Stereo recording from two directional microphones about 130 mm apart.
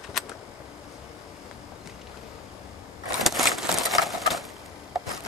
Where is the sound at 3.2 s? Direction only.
Centre (ahead or behind).